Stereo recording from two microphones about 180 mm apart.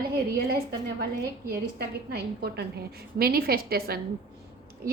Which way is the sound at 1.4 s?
60° right (ahead or behind).